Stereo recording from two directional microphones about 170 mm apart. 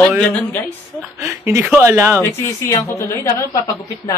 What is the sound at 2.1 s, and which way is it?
A woman's voice, 15° left (ahead or behind).